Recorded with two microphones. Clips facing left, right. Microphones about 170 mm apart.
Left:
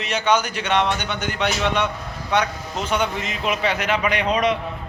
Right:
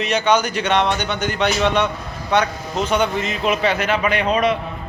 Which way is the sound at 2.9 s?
10° left (ahead or behind).